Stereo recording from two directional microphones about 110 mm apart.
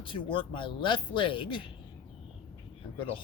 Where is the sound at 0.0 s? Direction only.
50° left (ahead or behind).